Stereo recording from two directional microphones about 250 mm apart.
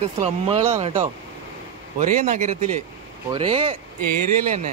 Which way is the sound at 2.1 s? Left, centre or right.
Right.